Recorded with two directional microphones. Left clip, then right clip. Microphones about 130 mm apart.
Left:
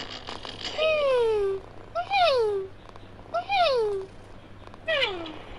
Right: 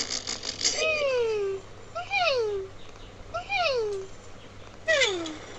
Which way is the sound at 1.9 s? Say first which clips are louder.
Left 3 dB; 55° left (ahead or behind).